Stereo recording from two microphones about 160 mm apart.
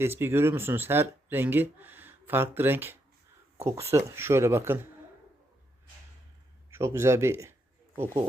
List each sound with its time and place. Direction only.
0.0 s speech: 15° right (ahead or behind)
6.7 s speech: 15° right (ahead or behind)